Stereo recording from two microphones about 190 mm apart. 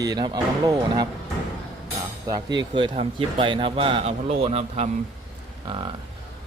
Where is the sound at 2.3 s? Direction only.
20° right (ahead or behind).